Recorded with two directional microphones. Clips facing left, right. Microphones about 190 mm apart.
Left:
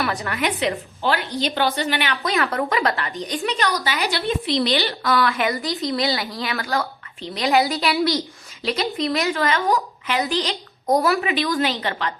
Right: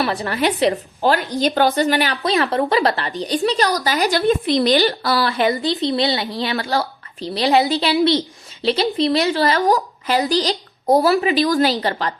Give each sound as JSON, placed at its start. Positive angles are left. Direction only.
{"t": 0.0, "sound": "a woman's voice", "side_deg": -30}
{"t": 2.2, "sound": "a woman's voice", "side_deg": -25}